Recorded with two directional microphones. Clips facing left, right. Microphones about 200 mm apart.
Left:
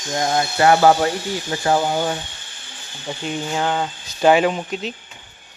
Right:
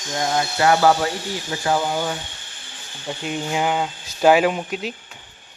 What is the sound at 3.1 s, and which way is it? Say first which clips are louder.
Speech: even; 5° right (ahead or behind).